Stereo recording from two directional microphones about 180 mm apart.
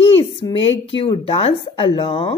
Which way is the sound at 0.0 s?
30° left (ahead or behind).